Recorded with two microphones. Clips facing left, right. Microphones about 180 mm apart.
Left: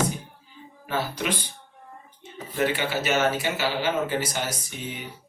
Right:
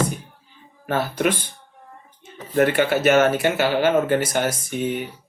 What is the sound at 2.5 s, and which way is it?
Speech, 55° right (ahead or behind).